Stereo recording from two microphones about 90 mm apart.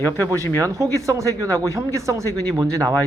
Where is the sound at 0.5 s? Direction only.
35° right (ahead or behind).